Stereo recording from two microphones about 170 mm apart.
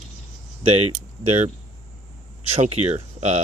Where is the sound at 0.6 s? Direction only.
35° right (ahead or behind).